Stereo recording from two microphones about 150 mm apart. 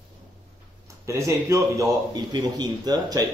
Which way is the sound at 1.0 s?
20° right (ahead or behind).